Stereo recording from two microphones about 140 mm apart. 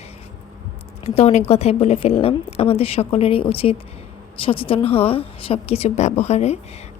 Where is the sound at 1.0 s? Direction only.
50° left (ahead or behind).